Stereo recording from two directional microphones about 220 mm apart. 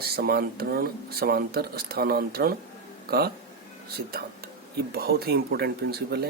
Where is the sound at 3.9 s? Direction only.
45° right (ahead or behind).